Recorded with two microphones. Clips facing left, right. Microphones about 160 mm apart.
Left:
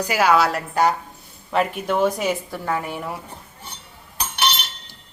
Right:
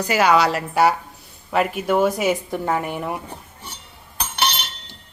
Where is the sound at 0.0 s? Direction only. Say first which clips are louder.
Right 1 dB; 5° left (ahead or behind).